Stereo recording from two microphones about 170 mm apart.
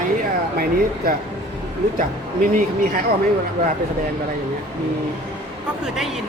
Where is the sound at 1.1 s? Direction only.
60° right (ahead or behind).